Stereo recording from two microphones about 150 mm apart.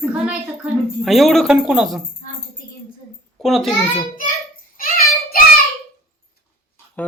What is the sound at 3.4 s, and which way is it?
Speech, centre (ahead or behind).